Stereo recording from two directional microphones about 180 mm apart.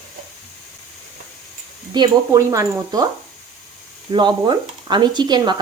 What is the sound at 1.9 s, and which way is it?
Speech, 20° right (ahead or behind).